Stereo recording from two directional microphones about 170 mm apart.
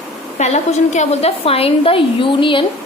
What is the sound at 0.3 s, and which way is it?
A woman's voice, 40° left (ahead or behind).